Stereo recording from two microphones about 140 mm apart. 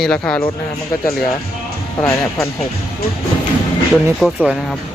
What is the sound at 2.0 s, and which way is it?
Speech, 20° left (ahead or behind).